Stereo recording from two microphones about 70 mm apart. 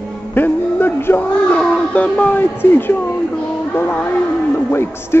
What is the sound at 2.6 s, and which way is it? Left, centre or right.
Speech, left.